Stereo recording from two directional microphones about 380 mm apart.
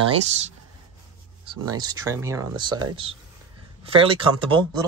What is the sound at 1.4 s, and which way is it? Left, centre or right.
Speech, centre.